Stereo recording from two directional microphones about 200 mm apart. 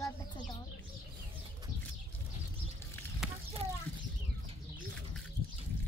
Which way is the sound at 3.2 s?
5° right (ahead or behind).